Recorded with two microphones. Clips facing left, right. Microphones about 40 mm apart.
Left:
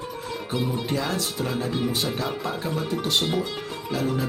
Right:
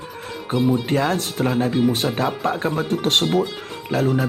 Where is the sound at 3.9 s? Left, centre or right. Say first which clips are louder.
Right 6 dB; right.